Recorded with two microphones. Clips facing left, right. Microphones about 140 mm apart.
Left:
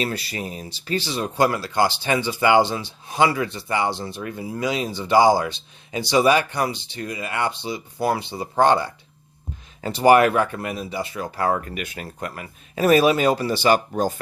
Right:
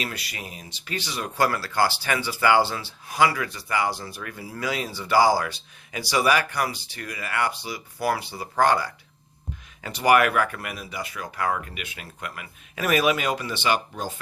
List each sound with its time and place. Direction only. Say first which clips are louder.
0.0 s speech: left 7 dB; 30° left (ahead or behind)